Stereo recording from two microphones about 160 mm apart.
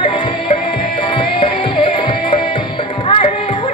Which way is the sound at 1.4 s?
30° left (ahead or behind).